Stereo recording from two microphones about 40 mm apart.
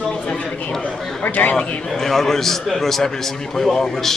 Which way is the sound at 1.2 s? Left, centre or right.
Left.